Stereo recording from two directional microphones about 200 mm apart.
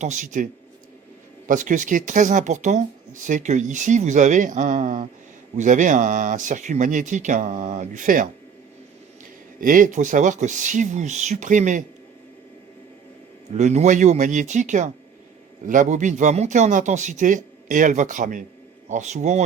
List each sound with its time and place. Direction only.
0.0 s speech: 40° right (ahead or behind)
1.5 s speech: 40° right (ahead or behind)
9.6 s speech: 45° right (ahead or behind)
13.5 s speech: 35° right (ahead or behind)